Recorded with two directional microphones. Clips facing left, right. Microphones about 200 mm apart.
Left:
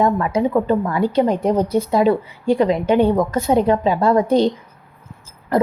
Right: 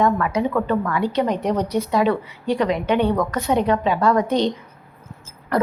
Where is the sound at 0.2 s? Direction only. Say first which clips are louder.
Left 3 dB; 30° left (ahead or behind).